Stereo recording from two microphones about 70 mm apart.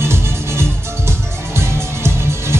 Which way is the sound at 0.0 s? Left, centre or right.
Right.